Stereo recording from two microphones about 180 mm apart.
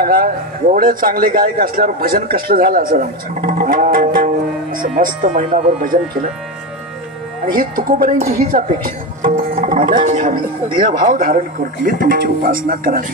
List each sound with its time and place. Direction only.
0.0 s a man's voice: 55° right (ahead or behind)
7.4 s a man's voice: 50° right (ahead or behind)
10.8 s speech: 25° right (ahead or behind)
11.1 s a man's voice: 50° right (ahead or behind)